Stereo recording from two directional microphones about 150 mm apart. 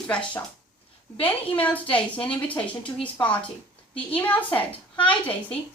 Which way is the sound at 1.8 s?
35° left (ahead or behind).